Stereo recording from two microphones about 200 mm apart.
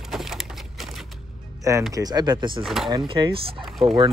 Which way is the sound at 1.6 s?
15° right (ahead or behind).